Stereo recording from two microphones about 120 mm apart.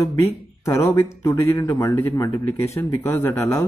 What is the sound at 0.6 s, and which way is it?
Speech, 25° left (ahead or behind).